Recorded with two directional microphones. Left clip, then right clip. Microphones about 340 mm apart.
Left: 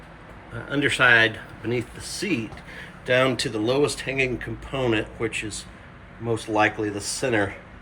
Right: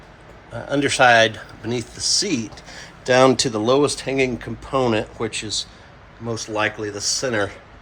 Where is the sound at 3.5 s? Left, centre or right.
Centre.